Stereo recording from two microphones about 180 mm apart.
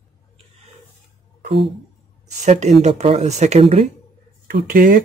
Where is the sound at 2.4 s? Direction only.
40° right (ahead or behind).